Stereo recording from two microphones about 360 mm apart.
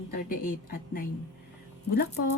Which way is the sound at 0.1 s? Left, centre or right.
Left.